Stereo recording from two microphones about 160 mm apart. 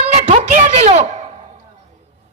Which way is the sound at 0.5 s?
55° right (ahead or behind).